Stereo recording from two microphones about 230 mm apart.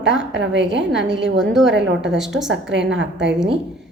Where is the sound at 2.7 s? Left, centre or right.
Right.